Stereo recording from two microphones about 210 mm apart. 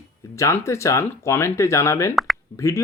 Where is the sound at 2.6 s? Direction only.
15° left (ahead or behind).